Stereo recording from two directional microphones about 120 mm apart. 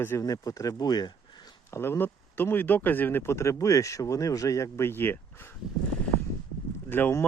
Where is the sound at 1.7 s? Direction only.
20° left (ahead or behind).